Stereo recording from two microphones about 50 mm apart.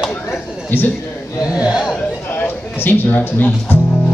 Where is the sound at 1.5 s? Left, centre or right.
Centre.